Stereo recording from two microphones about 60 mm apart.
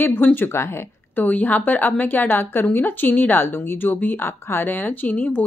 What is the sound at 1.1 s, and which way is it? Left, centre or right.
A woman's voice, left.